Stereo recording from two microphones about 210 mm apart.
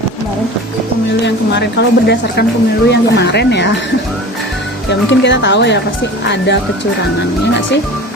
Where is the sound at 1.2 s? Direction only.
55° left (ahead or behind).